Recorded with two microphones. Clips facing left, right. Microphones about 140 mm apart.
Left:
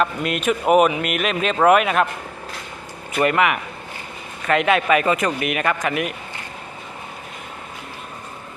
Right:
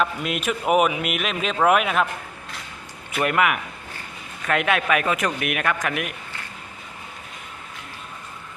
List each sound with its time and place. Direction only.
0.0 s speech: centre (ahead or behind)
3.1 s speech: centre (ahead or behind)